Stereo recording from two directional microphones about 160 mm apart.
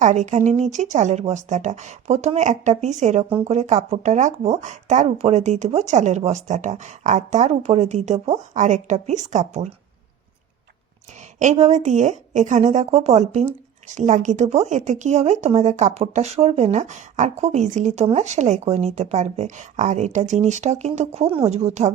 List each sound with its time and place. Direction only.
0.0 s a woman's voice: 45° right (ahead or behind)
11.3 s a woman's voice: 45° right (ahead or behind)